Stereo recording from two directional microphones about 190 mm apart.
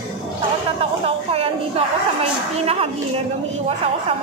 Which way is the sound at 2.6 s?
30° right (ahead or behind).